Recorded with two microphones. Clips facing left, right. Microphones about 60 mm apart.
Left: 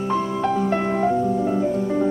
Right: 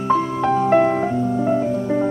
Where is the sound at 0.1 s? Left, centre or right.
Right.